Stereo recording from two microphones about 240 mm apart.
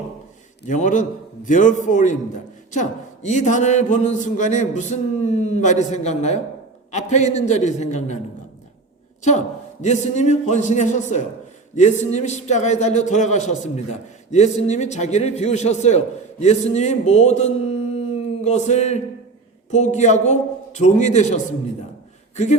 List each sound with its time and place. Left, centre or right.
0.7 s a man's voice: left
9.8 s speech: left